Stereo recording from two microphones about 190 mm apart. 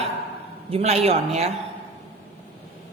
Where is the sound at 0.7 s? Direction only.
35° right (ahead or behind).